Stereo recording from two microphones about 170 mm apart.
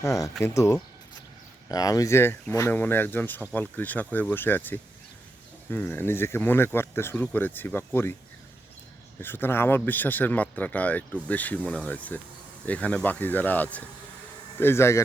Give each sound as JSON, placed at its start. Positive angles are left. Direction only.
{"t": 0.0, "sound": "speech", "side_deg": 20}
{"t": 9.2, "sound": "speech", "side_deg": 10}